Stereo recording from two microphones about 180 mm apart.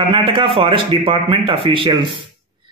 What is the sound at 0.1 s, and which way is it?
Speech, 30° right (ahead or behind).